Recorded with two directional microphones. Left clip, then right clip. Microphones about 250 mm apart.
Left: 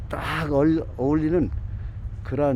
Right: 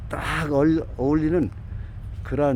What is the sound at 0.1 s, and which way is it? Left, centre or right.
Speech, centre.